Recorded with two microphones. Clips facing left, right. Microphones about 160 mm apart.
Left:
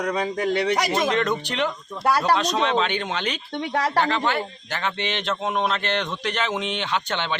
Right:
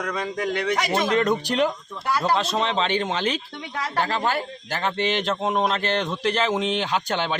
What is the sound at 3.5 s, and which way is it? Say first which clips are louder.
Speech: left 7 dB; 75° left (ahead or behind).